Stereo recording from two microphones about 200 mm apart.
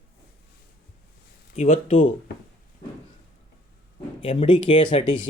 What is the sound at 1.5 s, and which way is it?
Speech, 35° left (ahead or behind).